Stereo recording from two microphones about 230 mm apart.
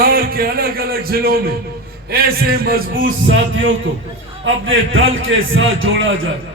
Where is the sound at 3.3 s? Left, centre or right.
Right.